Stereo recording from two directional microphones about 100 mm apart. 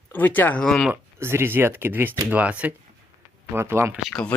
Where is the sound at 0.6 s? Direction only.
5° left (ahead or behind).